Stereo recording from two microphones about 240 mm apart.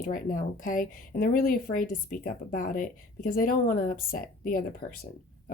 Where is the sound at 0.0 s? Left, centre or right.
Left.